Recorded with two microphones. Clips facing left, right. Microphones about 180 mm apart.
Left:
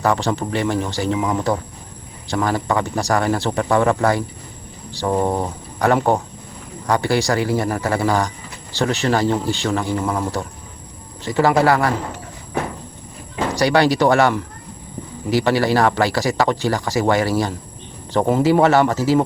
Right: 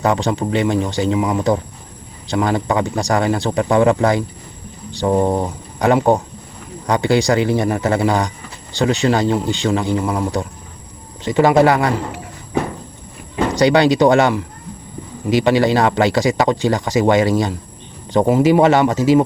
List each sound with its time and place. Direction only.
0.0 s speech: 20° right (ahead or behind)
13.6 s speech: 20° right (ahead or behind)